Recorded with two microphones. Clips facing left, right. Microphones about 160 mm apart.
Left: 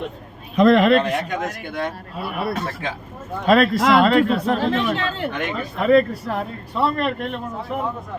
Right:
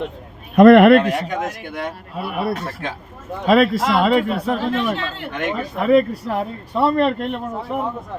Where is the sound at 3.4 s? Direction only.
5° right (ahead or behind).